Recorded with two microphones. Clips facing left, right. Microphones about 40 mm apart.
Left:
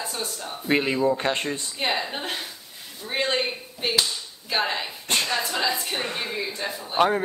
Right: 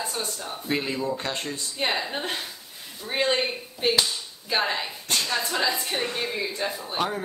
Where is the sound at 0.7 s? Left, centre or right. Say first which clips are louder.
Left 6 dB; left.